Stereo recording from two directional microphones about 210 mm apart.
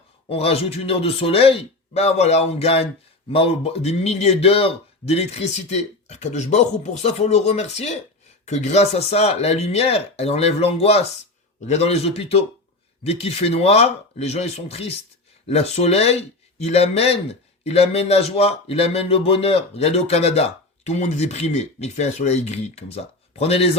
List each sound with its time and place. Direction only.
0.3 s a man's voice: 30° left (ahead or behind)